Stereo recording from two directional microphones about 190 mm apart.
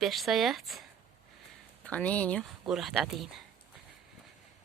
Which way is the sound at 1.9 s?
5° left (ahead or behind).